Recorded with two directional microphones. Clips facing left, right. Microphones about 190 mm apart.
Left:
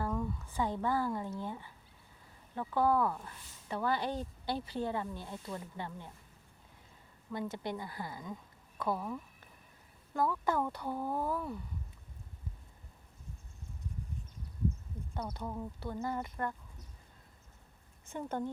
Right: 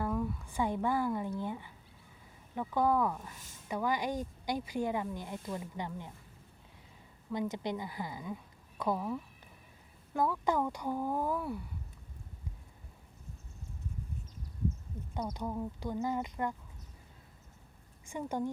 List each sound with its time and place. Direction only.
0.0 s speech: 10° right (ahead or behind)
3.3 s speech: 45° right (ahead or behind)
3.7 s speech: 15° right (ahead or behind)
7.3 s speech: 15° right (ahead or behind)
15.1 s speech: 15° right (ahead or behind)
18.0 s speech: 10° right (ahead or behind)